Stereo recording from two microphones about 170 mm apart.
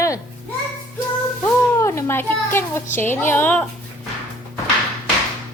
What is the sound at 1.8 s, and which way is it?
A child's voice, 15° left (ahead or behind).